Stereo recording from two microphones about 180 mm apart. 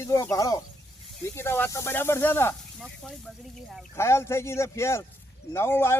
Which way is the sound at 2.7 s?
Centre (ahead or behind).